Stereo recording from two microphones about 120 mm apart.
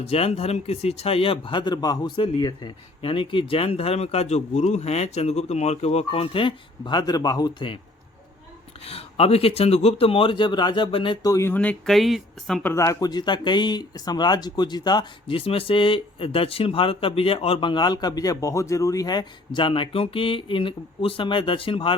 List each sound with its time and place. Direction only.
0.1 s a man's voice: 55° left (ahead or behind); by 7.7 s 35° left (ahead or behind)
8.8 s a man's voice: 55° left (ahead or behind)
11.2 s speech: 25° left (ahead or behind)
11.5 s speech: 10° left (ahead or behind)
12.6 s speech: 25° left (ahead or behind)
15.4 s a man's voice: 50° left (ahead or behind)